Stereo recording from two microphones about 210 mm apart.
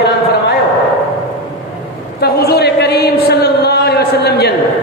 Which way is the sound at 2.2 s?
50° left (ahead or behind).